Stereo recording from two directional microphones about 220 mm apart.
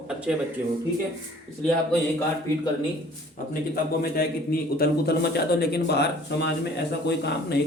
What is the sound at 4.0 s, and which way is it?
A man's voice, 45° left (ahead or behind).